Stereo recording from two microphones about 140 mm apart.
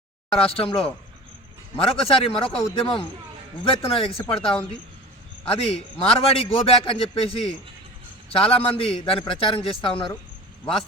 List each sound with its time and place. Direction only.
0.3 s a man's voice: 45° left (ahead or behind)
5.5 s a man's voice: 40° left (ahead or behind)